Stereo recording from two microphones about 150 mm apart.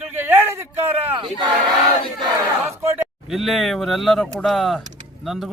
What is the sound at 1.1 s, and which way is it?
Speech, 30° right (ahead or behind).